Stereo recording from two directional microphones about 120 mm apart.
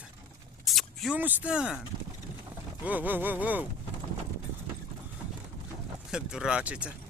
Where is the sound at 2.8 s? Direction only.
15° right (ahead or behind).